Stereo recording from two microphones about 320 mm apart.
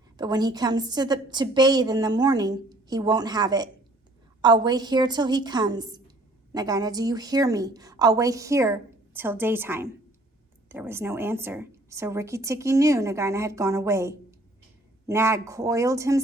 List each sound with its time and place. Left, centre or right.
0.2 s speech: centre